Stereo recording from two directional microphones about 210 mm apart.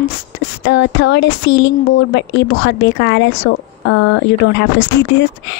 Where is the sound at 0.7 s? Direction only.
60° left (ahead or behind).